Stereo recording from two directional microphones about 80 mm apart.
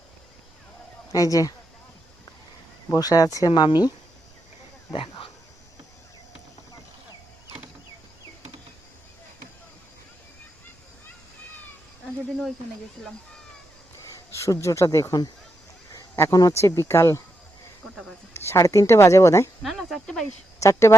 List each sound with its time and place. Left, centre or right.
1.1 s speech: left
2.9 s speech: left
4.9 s dog: left
14.3 s speech: left
16.3 s speech: left
18.3 s speech: left
19.6 s a sound: centre
20.6 s speech: left